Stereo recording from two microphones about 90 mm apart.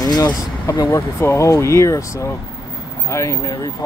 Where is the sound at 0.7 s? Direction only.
30° left (ahead or behind).